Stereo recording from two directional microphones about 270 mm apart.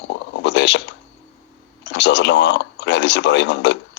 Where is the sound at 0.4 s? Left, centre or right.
Left.